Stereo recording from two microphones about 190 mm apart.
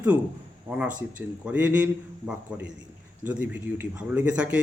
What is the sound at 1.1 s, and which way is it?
A man's voice, 5° right (ahead or behind).